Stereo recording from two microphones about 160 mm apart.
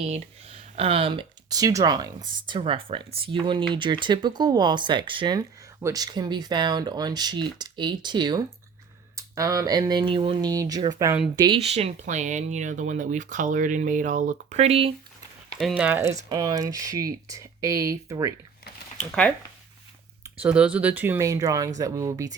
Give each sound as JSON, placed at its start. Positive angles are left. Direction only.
{"t": 0.0, "sound": "speech", "side_deg": -40}
{"t": 11.6, "sound": "speech", "side_deg": -40}
{"t": 15.5, "sound": "speech", "side_deg": -5}
{"t": 16.3, "sound": "speech", "side_deg": -25}
{"t": 18.9, "sound": "speech", "side_deg": 5}
{"t": 20.4, "sound": "speech", "side_deg": -5}